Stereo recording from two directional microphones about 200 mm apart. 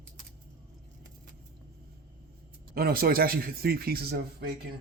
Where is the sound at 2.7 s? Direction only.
50° right (ahead or behind).